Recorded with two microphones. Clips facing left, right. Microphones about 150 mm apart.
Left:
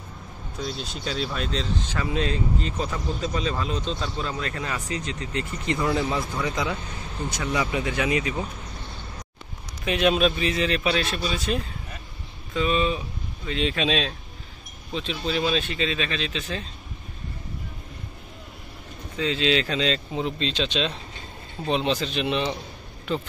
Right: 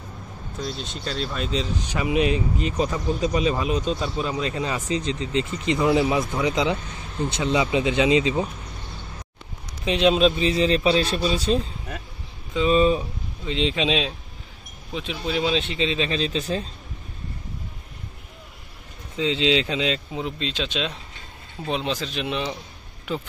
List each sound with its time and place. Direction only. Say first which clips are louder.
0.6 s speech: right 1 dB; centre (ahead or behind); by 8.5 s 20° right (ahead or behind)
9.8 s speech: right 3 dB; 25° right (ahead or behind)
12.7 s speech: right 8 dB; 35° right (ahead or behind)
13.5 s speech: right 2 dB; 20° right (ahead or behind)
19.1 s speech: right 2 dB; 20° right (ahead or behind)
20.1 s speech: left 2 dB; 5° right (ahead or behind)